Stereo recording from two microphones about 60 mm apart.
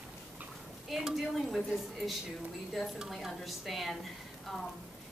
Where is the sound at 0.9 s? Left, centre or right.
Centre.